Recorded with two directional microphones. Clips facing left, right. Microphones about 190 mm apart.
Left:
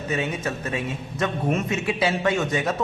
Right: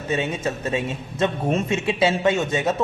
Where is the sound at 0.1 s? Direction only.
25° right (ahead or behind).